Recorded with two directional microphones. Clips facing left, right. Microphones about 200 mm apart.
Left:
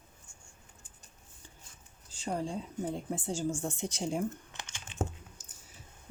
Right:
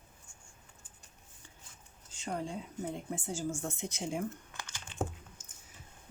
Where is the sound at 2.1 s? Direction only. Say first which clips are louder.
Left 3 dB; 30° left (ahead or behind).